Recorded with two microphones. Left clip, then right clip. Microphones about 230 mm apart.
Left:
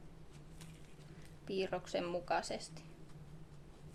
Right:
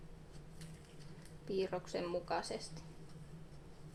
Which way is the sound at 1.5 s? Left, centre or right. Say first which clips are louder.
Left 1 dB; left.